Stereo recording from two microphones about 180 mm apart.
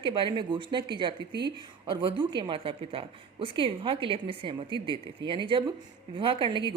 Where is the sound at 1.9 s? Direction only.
25° right (ahead or behind).